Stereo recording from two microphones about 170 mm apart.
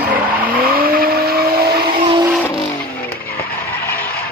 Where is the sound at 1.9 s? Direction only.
30° right (ahead or behind).